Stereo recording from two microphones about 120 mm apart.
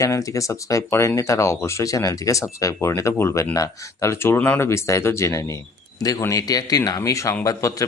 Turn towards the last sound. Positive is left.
turn(degrees=25)  # may be behind; listen again after turning